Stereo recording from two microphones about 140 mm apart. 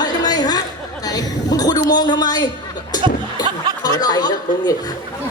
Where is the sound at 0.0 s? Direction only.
30° left (ahead or behind).